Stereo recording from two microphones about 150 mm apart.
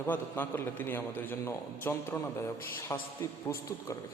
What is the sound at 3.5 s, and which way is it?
Speech, 20° left (ahead or behind).